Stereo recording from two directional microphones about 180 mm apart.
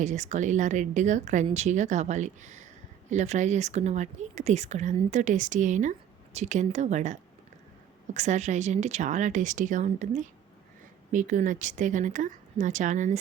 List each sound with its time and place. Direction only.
0.0 s a woman's voice: 40° right (ahead or behind)